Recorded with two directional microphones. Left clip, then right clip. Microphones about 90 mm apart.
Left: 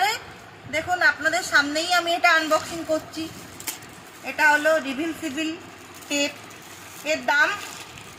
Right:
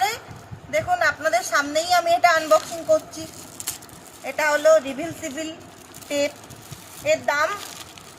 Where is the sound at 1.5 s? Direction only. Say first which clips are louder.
Even; 45° right (ahead or behind).